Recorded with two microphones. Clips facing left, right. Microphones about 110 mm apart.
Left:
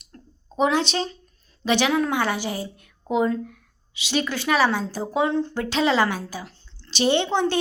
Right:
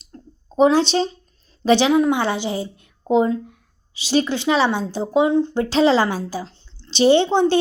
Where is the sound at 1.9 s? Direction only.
20° right (ahead or behind).